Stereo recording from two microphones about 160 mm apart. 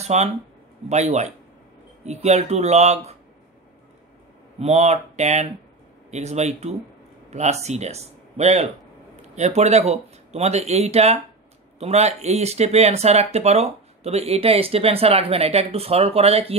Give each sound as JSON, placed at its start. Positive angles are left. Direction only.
{"t": 0.0, "sound": "speech", "side_deg": -45}
{"t": 4.6, "sound": "speech", "side_deg": -45}